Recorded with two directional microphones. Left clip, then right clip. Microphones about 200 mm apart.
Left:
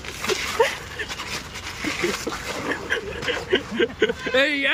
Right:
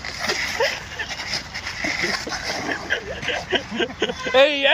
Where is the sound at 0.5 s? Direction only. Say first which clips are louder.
Left 1 dB; 15° left (ahead or behind).